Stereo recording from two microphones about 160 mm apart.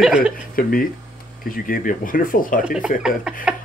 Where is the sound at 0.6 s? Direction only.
65° left (ahead or behind).